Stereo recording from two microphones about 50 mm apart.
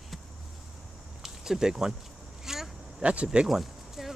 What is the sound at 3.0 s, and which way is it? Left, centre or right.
Speech, right.